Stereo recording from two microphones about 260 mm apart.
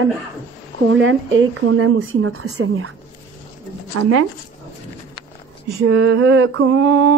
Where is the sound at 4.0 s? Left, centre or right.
Right.